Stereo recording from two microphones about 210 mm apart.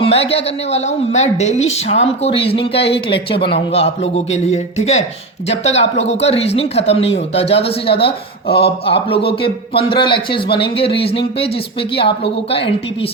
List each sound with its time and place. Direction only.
0.1 s a man's voice: 30° left (ahead or behind)